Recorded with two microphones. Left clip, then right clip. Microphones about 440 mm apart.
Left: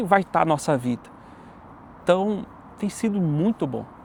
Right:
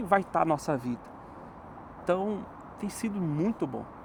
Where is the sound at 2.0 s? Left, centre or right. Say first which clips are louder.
Left 8 dB; left.